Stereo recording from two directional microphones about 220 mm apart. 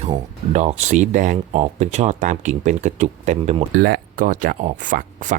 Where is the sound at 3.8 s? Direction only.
45° right (ahead or behind).